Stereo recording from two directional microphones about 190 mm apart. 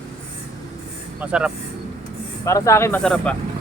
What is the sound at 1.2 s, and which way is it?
Speech, 5° right (ahead or behind).